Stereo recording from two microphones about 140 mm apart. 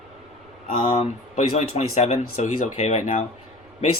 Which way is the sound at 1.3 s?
50° left (ahead or behind).